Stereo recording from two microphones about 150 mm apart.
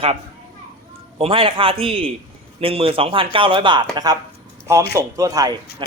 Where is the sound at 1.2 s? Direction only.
35° right (ahead or behind).